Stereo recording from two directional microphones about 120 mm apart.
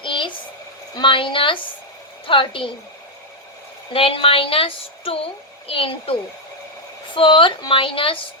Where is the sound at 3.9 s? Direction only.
50° left (ahead or behind).